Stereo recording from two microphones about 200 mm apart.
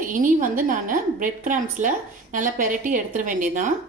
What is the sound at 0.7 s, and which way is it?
A woman's voice, 40° right (ahead or behind).